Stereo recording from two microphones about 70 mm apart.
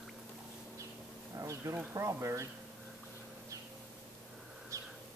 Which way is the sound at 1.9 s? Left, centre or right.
Right.